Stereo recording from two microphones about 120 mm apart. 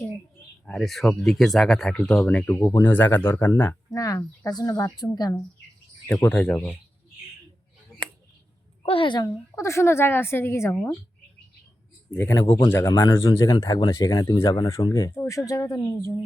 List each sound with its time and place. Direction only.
0.6 s speech: centre (ahead or behind)
3.9 s speech: 30° left (ahead or behind)
6.2 s speech: 15° left (ahead or behind)
8.8 s a woman's voice: 50° left (ahead or behind)
9.2 s a woman's voice: 25° left (ahead or behind)
12.1 s a woman's voice: 20° left (ahead or behind)
13.5 s speech: 40° left (ahead or behind)
14.6 s a woman's voice: 25° left (ahead or behind)